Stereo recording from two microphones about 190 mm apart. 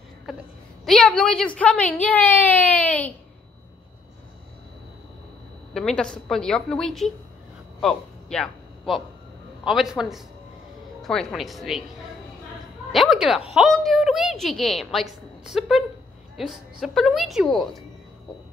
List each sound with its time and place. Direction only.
0.8 s a woman's voice: 5° left (ahead or behind)
5.7 s a woman's voice: centre (ahead or behind)
7.8 s a sound: 5° left (ahead or behind)
9.7 s a woman's voice: centre (ahead or behind)
12.9 s a woman's voice: centre (ahead or behind)